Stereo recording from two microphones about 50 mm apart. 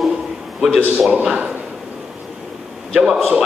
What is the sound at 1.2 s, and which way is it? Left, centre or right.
Speech, right.